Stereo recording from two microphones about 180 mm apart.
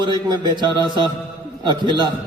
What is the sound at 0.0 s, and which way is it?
A man's voice, 25° right (ahead or behind).